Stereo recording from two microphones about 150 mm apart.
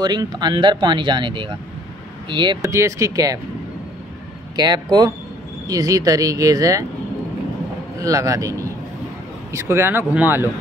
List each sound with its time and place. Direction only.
0.0 s speech: 25° right (ahead or behind)
2.7 s speech: 20° right (ahead or behind)
4.6 s speech: 30° right (ahead or behind)
8.0 s speech: 20° right (ahead or behind)